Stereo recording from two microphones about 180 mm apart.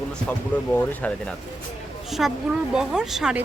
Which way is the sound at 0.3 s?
10° left (ahead or behind).